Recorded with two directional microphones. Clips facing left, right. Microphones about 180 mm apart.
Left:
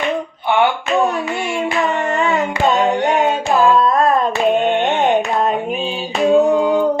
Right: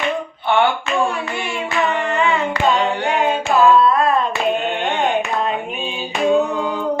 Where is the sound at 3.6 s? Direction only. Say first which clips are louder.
Right 1 dB; 40° left (ahead or behind).